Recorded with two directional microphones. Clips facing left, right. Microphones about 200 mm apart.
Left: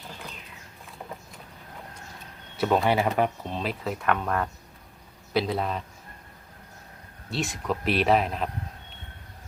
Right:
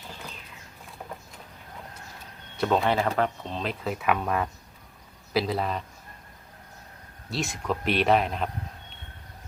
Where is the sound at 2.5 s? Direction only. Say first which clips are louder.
Left 1 dB; 5° left (ahead or behind).